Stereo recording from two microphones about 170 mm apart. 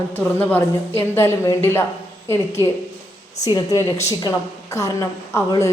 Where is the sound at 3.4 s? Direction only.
20° left (ahead or behind).